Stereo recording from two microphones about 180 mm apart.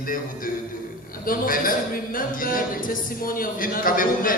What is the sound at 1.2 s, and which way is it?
A man's voice, 50° left (ahead or behind).